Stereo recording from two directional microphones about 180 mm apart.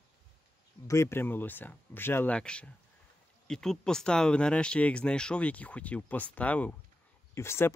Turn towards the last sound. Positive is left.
turn(degrees=15)  # may be behind; listen again after turning